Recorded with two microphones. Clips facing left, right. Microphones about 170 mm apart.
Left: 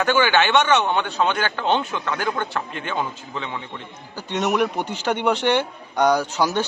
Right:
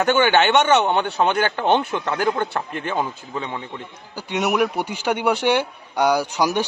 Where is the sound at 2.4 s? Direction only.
40° right (ahead or behind).